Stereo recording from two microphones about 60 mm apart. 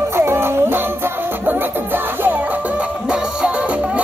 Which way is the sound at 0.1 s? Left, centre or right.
Right.